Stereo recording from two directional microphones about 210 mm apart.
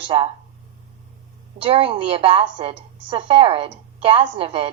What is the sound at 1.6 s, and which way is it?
A woman's voice, 25° right (ahead or behind).